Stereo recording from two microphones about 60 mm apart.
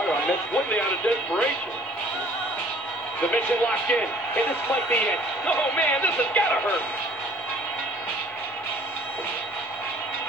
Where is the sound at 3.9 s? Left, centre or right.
Left.